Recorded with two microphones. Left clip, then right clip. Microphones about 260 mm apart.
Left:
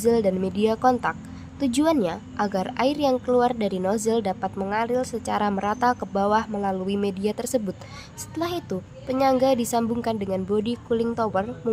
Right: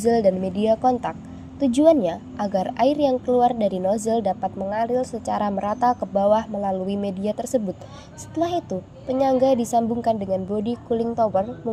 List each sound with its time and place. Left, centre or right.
0.0 s a woman's voice: centre
9.0 s a woman's voice: centre